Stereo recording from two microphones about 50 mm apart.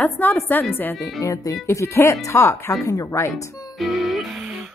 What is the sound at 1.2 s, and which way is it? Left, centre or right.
Speech, left.